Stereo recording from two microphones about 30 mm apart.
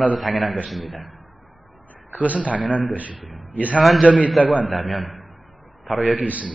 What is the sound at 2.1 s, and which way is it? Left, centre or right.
Speech, right.